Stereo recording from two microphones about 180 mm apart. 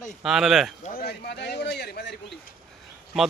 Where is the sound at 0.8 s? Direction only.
55° left (ahead or behind); by 2.2 s 70° left (ahead or behind).